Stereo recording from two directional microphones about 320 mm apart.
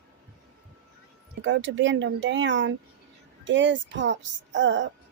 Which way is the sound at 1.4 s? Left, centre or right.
Right.